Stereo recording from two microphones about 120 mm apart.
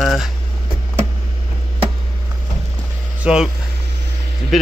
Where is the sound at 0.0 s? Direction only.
Centre (ahead or behind).